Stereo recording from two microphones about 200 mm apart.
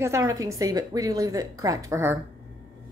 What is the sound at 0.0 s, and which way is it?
A woman's voice, 15° right (ahead or behind).